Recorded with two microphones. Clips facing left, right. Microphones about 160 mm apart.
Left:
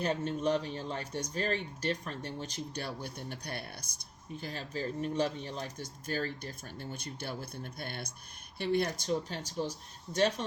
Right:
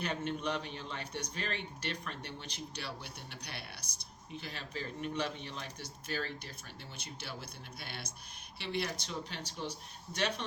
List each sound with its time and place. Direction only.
0.0 s speech: 40° left (ahead or behind)